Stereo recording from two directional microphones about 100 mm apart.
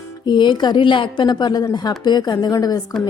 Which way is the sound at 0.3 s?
50° left (ahead or behind).